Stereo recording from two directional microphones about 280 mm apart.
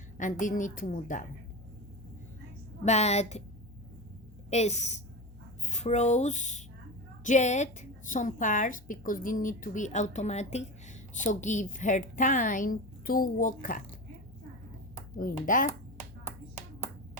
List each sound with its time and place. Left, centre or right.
0.2 s a woman's voice: left
2.8 s a woman's voice: left
4.4 s a woman's voice: left
15.2 s a woman's voice: left